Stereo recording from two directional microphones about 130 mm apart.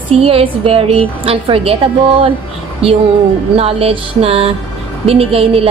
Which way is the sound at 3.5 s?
50° right (ahead or behind).